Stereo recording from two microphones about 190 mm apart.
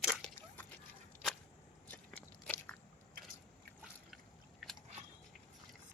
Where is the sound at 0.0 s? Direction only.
Centre (ahead or behind).